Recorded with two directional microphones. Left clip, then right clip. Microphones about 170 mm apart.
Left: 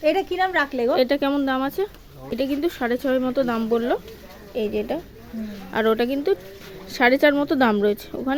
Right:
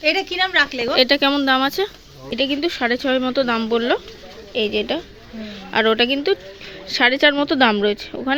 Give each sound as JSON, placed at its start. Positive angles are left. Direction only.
{"t": 0.0, "sound": "a woman's voice", "side_deg": 40}
{"t": 0.9, "sound": "speech", "side_deg": 10}